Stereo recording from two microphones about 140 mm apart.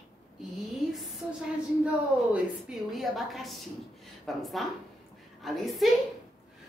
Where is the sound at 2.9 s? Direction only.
Centre (ahead or behind).